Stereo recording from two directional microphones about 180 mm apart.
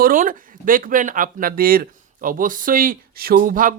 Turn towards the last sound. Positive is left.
turn(degrees=-50)  # may be behind; listen again after turning